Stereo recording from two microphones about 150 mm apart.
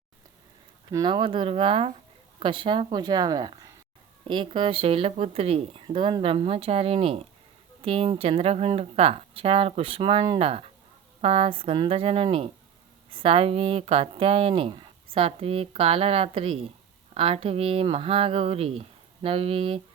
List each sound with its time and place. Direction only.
0.9 s speech: 25° right (ahead or behind)